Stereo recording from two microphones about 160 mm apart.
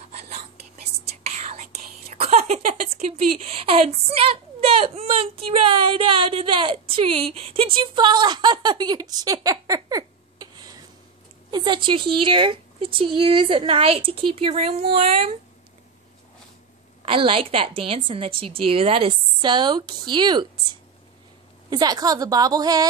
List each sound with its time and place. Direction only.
1.4 s whispering: 45° right (ahead or behind)
2.1 s a woman's voice: 40° right (ahead or behind)
17.0 s a woman's voice: 35° right (ahead or behind)
21.6 s a woman's voice: 25° right (ahead or behind)